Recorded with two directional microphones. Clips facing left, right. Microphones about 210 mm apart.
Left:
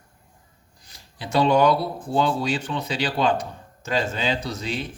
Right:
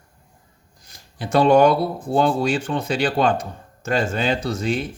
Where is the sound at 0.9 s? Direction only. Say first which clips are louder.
Right 5 dB; 50° right (ahead or behind).